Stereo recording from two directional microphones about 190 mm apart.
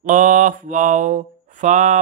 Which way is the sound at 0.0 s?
40° right (ahead or behind).